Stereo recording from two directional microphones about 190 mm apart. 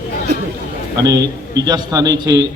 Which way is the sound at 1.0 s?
20° right (ahead or behind).